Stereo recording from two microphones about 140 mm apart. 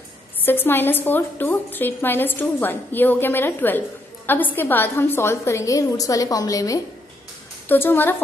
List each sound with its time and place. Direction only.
0.4 s a woman's voice: 15° left (ahead or behind)
7.6 s a woman's voice: 15° left (ahead or behind)